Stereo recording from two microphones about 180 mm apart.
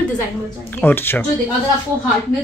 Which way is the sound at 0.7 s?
10° left (ahead or behind).